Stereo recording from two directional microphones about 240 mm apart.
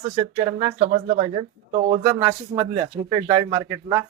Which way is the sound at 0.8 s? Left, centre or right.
Right.